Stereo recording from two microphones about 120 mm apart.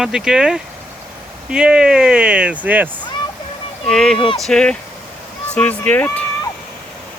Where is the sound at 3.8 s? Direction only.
5° left (ahead or behind).